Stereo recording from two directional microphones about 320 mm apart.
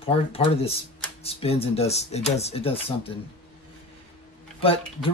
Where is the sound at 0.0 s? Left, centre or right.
Centre.